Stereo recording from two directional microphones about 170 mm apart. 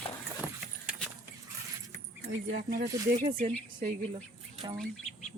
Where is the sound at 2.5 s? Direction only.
55° right (ahead or behind).